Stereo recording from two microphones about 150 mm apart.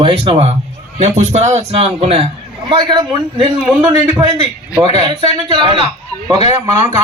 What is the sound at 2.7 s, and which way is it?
Speech, 30° right (ahead or behind).